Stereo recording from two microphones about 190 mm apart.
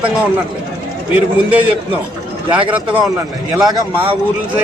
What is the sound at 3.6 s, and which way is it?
Speech, 20° right (ahead or behind).